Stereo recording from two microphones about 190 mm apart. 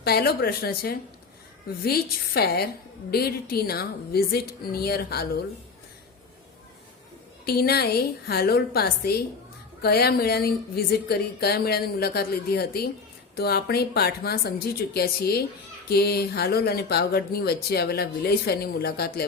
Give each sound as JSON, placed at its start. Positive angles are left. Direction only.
{"t": 0.0, "sound": "a woman's voice", "side_deg": 55}
{"t": 7.4, "sound": "speech", "side_deg": 55}